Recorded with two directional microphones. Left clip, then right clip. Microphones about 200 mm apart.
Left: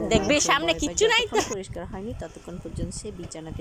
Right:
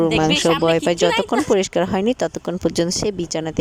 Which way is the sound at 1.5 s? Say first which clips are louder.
Right 17 dB; 50° right (ahead or behind).